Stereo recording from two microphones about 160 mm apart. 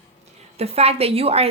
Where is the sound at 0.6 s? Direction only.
40° right (ahead or behind).